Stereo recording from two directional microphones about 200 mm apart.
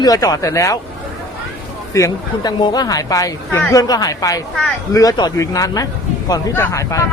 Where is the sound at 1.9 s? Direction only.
15° left (ahead or behind).